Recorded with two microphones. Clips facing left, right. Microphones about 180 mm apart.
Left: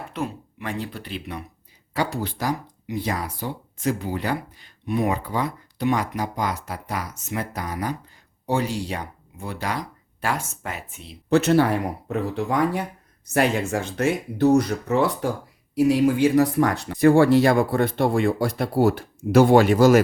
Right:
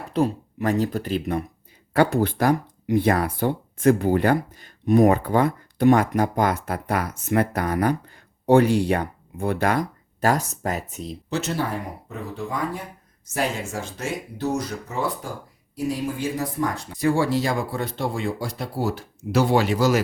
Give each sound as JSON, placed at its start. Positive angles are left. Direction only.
{"t": 0.1, "sound": "speech", "side_deg": -40}
{"t": 11.3, "sound": "speech", "side_deg": 60}
{"t": 13.2, "sound": "speech", "side_deg": 65}